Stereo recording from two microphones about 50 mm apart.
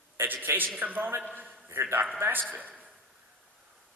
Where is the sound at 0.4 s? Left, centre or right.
Right.